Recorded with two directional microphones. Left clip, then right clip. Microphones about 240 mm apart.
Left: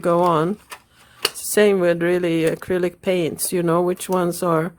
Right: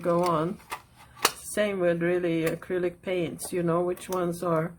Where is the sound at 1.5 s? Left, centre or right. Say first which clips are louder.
Left 12 dB; left.